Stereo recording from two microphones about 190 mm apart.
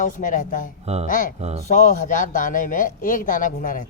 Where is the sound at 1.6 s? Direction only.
40° left (ahead or behind).